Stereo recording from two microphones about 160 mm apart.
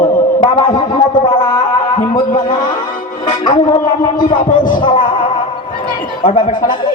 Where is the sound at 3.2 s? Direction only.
30° left (ahead or behind).